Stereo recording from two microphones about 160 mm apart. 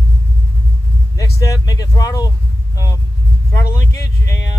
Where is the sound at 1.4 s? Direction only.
20° left (ahead or behind).